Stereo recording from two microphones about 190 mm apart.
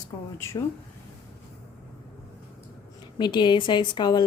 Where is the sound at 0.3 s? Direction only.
15° left (ahead or behind).